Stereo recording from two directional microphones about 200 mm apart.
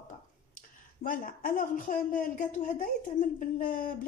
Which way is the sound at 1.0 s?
45° left (ahead or behind).